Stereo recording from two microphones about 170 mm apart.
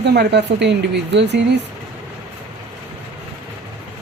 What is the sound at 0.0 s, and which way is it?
Speech, 80° right.